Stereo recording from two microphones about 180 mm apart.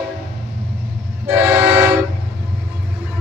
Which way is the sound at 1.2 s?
10° right (ahead or behind).